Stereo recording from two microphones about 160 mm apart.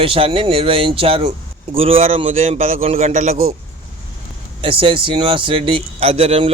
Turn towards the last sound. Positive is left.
turn(degrees=-40)  # may be behind; listen again after turning